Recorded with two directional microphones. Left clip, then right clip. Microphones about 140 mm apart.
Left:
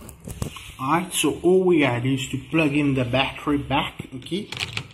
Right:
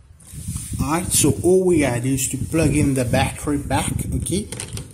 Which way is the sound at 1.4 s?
15° right (ahead or behind).